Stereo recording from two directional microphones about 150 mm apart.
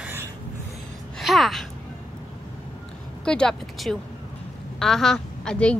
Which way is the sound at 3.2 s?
5° left (ahead or behind).